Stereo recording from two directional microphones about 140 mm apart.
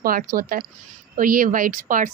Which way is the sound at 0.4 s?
75° right (ahead or behind).